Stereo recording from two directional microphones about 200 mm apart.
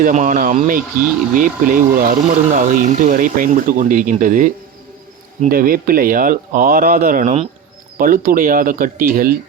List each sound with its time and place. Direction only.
0.0 s speech: 40° right (ahead or behind)